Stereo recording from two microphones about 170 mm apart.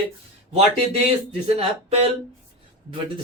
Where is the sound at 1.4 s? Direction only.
35° right (ahead or behind).